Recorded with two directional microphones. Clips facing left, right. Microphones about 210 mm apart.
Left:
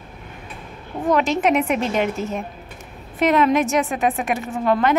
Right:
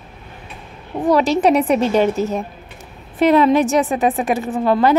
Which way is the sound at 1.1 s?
35° right (ahead or behind).